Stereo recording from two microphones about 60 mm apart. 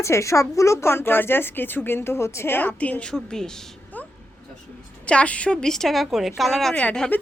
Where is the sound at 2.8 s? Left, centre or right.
Left.